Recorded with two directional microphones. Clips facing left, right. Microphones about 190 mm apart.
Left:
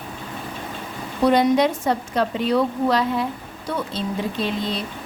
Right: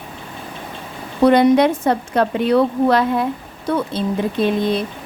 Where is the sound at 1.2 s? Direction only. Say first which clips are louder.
Right 5 dB; 60° right (ahead or behind).